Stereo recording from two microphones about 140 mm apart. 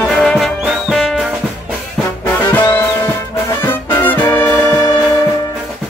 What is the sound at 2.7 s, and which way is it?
Brass instrument, 15° left (ahead or behind).